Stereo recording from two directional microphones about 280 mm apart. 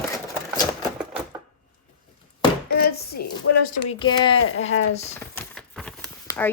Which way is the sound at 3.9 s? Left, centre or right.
Centre.